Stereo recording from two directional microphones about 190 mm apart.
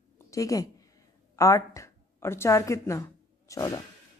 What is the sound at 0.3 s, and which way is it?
A woman's voice, 20° left (ahead or behind).